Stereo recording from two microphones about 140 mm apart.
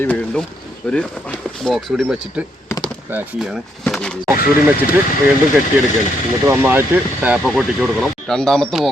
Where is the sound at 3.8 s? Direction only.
5° left (ahead or behind).